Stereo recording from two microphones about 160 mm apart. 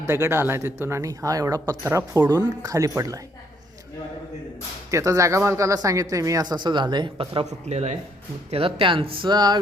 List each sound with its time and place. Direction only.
0.0 s speech: 15° right (ahead or behind)
4.9 s speech: 20° right (ahead or behind)